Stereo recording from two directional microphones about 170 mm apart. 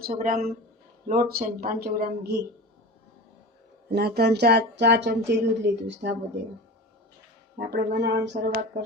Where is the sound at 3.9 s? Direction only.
70° right (ahead or behind); by 6.1 s 90° right.